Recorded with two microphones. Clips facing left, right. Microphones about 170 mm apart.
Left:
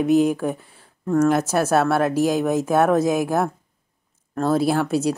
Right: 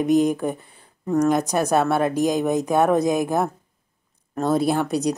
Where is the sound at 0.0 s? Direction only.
5° left (ahead or behind).